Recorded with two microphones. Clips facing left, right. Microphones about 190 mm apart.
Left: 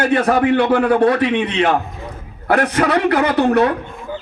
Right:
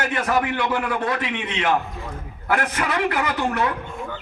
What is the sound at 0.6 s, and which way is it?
A man's voice, 60° left (ahead or behind).